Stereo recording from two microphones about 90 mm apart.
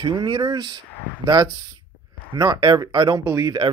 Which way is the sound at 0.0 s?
50° right (ahead or behind).